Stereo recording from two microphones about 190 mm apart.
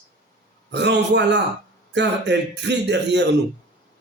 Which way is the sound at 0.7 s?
65° right (ahead or behind).